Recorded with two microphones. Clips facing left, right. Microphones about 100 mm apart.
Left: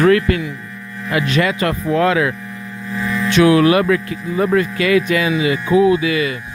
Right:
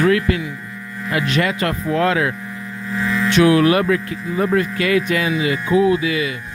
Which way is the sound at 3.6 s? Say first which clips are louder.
Left 2 dB; 90° left.